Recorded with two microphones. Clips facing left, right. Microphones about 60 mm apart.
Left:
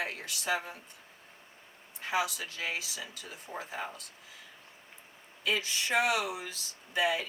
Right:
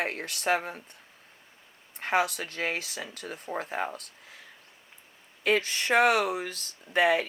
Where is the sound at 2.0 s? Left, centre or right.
Right.